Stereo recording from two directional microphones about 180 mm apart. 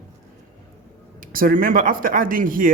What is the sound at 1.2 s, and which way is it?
Speech, 50° right (ahead or behind).